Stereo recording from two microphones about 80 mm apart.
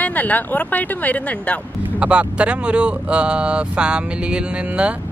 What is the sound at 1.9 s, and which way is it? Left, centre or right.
Speech, centre.